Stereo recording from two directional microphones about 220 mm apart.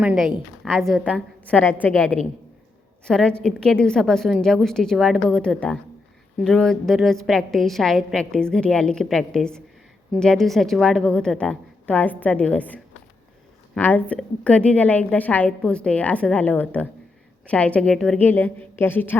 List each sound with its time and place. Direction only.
0.0 s a woman's voice: 5° right (ahead or behind)